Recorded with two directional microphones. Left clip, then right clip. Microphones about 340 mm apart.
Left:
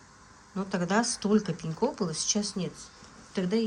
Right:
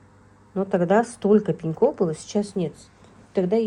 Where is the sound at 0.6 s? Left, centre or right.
Centre.